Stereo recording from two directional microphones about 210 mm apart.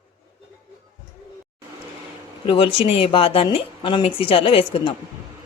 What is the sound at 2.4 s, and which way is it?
A woman's voice, 25° left (ahead or behind).